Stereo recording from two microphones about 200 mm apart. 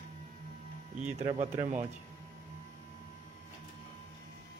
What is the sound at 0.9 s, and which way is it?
Speech, 35° right (ahead or behind).